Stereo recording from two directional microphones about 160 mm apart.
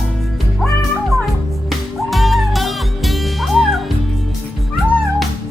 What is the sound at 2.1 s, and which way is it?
Music, centre (ahead or behind).